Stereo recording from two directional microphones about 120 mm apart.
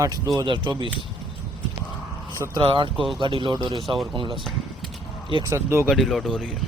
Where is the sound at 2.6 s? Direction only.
45° right (ahead or behind).